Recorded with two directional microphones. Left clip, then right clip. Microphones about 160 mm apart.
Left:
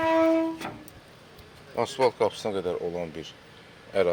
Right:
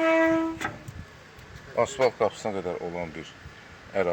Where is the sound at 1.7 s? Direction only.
20° left (ahead or behind).